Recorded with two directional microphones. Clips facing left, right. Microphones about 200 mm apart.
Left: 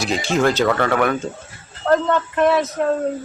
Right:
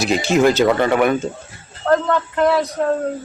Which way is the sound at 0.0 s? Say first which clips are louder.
Right 4 dB; 5° right (ahead or behind).